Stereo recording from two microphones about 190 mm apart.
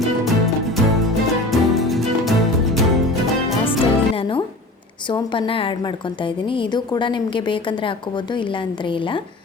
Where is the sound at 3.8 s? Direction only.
30° left (ahead or behind).